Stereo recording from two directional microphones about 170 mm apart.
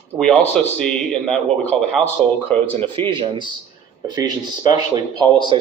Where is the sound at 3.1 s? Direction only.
30° right (ahead or behind).